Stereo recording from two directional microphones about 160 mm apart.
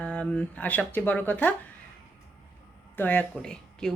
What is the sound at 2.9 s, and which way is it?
Speech, 10° left (ahead or behind).